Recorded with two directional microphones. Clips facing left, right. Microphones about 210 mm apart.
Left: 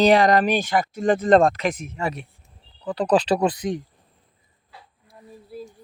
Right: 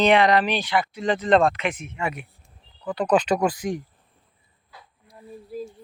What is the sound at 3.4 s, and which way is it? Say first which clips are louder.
Speech: left 1 dB; 20° left (ahead or behind).